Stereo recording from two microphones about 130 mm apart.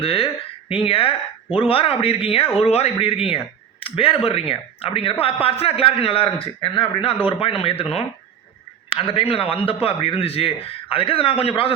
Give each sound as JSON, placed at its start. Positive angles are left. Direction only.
{"t": 0.0, "sound": "speech", "side_deg": 45}
{"t": 7.3, "sound": "speech", "side_deg": 45}